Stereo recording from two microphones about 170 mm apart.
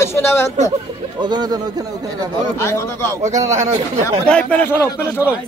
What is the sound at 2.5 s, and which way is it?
Speech, 15° left (ahead or behind).